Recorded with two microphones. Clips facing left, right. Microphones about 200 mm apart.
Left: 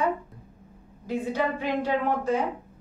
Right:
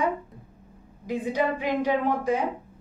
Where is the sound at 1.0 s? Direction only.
15° right (ahead or behind).